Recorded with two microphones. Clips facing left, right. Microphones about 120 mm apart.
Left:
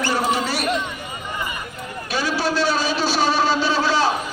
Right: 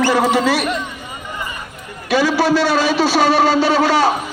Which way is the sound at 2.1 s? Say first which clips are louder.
Right 8 dB; 90° right.